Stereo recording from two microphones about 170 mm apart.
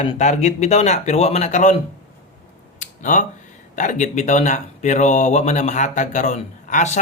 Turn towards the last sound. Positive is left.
turn(degrees=45)  # may be behind; listen again after turning